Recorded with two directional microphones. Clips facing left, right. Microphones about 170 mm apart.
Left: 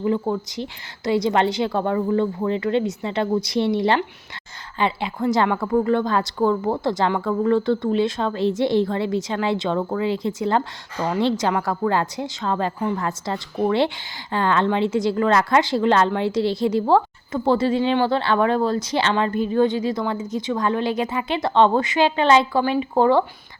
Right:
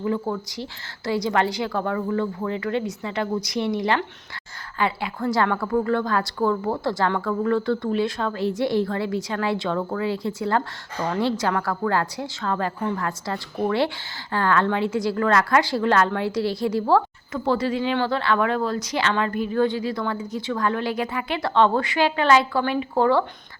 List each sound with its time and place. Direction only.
0.0 s a woman's voice: 20° left (ahead or behind)